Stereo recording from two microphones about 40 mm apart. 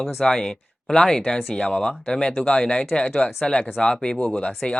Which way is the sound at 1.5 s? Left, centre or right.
Left.